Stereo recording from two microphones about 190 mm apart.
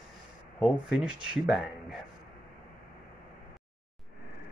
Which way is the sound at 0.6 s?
Centre (ahead or behind).